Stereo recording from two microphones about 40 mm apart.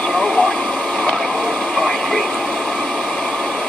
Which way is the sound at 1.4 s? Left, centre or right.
Centre.